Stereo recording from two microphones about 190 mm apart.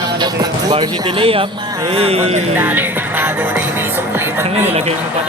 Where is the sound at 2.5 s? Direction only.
10° right (ahead or behind).